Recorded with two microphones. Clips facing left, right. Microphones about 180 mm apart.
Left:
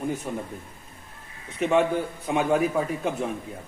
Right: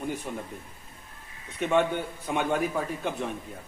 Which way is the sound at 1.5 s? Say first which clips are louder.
Left 3 dB; centre (ahead or behind).